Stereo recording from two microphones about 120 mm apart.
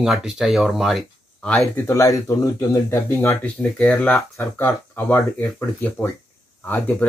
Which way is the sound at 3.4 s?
10° left (ahead or behind).